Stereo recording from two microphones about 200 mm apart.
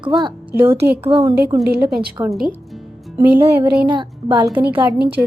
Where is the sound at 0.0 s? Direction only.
25° right (ahead or behind).